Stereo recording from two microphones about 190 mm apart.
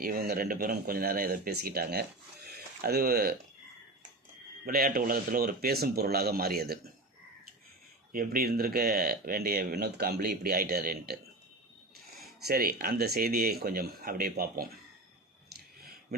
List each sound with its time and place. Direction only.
0.0 s a man's voice: 50° right (ahead or behind)
4.6 s a man's voice: 50° right (ahead or behind)
8.1 s a man's voice: 50° right (ahead or behind)
12.4 s a man's voice: 55° right (ahead or behind)
15.4 s a sound: 55° right (ahead or behind)